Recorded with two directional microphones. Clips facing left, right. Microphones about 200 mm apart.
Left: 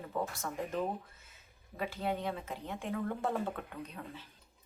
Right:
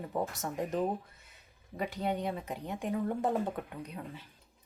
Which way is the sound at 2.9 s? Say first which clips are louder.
Right 4 dB; 15° right (ahead or behind).